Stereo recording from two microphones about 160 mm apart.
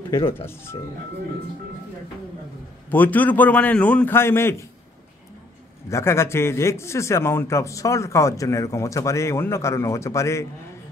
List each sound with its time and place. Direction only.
2.9 s speech: 10° left (ahead or behind)
5.9 s speech: 15° left (ahead or behind)